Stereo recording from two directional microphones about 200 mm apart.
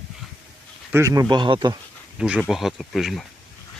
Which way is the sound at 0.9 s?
15° right (ahead or behind).